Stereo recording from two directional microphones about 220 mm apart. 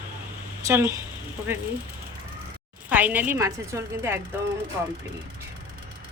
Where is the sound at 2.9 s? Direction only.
5° right (ahead or behind).